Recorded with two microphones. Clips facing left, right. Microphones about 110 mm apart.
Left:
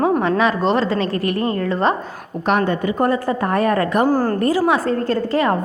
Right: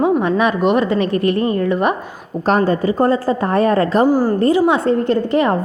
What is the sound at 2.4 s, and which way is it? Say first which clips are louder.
A woman's voice: right 3 dB; 35° right (ahead or behind).